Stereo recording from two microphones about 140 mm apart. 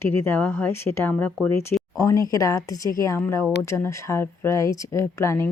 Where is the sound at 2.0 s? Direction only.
25° left (ahead or behind).